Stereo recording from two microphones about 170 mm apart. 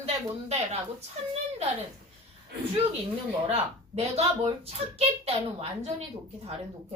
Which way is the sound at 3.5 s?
35° right (ahead or behind).